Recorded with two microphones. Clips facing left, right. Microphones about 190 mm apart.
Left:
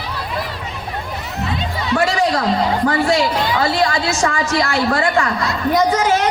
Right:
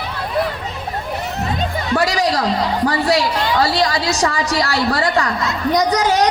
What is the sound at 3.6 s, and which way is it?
Speech, 35° right (ahead or behind).